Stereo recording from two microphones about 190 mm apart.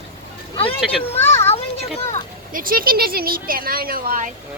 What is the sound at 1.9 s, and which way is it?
Speech, 35° left (ahead or behind).